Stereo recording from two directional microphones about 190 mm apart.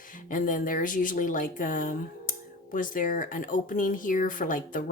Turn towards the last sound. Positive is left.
turn(degrees=45)  # may be behind; listen again after turning